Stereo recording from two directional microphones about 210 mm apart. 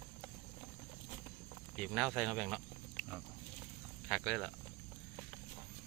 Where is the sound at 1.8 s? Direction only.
Centre (ahead or behind).